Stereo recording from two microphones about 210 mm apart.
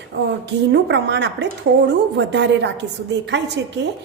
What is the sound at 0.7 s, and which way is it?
A woman's voice, 55° right (ahead or behind).